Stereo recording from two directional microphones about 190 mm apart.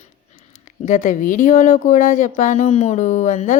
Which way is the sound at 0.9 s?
40° left (ahead or behind).